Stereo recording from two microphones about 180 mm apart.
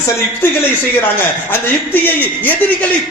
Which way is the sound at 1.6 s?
10° left (ahead or behind).